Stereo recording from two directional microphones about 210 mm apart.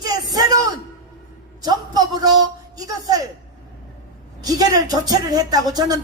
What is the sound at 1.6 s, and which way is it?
Speech, 20° right (ahead or behind).